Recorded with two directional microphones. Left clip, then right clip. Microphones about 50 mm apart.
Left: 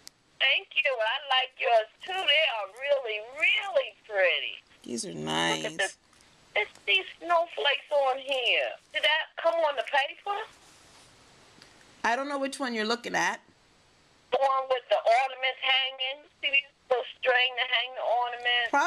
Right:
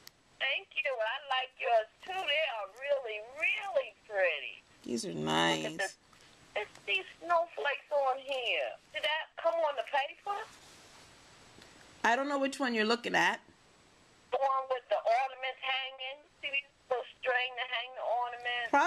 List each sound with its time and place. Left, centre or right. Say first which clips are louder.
0.4 s speech: left 8 dB; left
2.0 s speech: left 7 dB; left
3.3 s speech: left 6 dB; left
4.8 s speech: left 1 dB; centre
6.5 s speech: left 8 dB; left
12.2 s speech: left 1 dB; centre
14.3 s speech: left 6 dB; left